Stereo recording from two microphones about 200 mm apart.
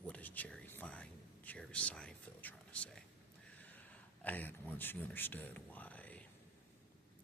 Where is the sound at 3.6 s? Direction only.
10° left (ahead or behind).